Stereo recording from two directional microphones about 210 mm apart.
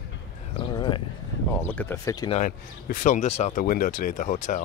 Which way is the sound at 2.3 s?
40° left (ahead or behind).